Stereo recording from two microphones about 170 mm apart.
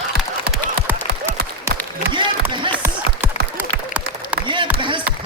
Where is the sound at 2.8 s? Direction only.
10° right (ahead or behind).